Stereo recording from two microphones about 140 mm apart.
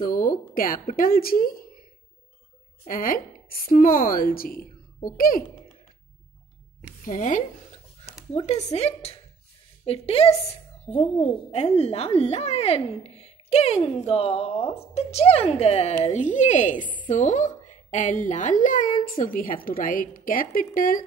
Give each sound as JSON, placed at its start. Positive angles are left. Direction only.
{"t": 0.0, "sound": "a sound", "side_deg": 90}
{"t": 0.9, "sound": "a woman's voice", "side_deg": 90}
{"t": 2.9, "sound": "a woman's voice", "side_deg": 90}
{"t": 7.1, "sound": "a woman's voice", "side_deg": 65}
{"t": 8.3, "sound": "a woman's voice", "side_deg": 50}
{"t": 16.8, "sound": "a woman's voice", "side_deg": 35}
{"t": 17.1, "sound": "a woman's voice", "side_deg": 60}